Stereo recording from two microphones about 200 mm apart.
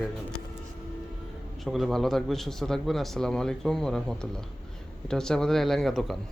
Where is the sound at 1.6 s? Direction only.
Centre (ahead or behind).